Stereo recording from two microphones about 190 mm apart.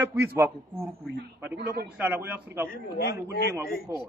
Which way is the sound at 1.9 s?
10° right (ahead or behind).